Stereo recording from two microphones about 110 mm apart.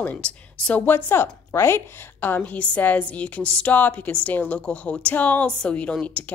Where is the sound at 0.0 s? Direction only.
10° left (ahead or behind).